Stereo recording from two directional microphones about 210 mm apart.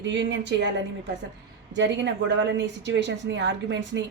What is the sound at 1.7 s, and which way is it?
A woman's voice, 60° right (ahead or behind).